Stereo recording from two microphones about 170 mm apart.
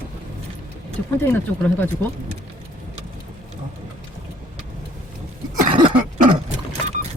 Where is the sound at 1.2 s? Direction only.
10° left (ahead or behind).